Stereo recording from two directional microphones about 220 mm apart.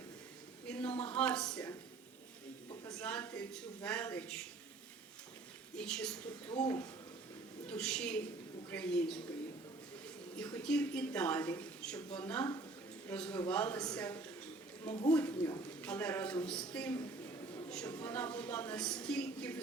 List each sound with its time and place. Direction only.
0.7 s a woman's voice: 5° left (ahead or behind)
3.0 s a woman's voice: 5° left (ahead or behind)
5.7 s a woman's voice: 5° left (ahead or behind)
6.5 s speech: 25° left (ahead or behind)
7.7 s a woman's voice: 5° left (ahead or behind)
10.3 s a woman's voice: 5° left (ahead or behind)
15.3 s speech: 20° left (ahead or behind)
15.8 s a woman's voice: 5° left (ahead or behind)